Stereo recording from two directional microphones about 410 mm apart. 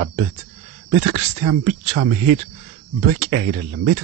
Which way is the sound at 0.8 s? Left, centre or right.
Centre.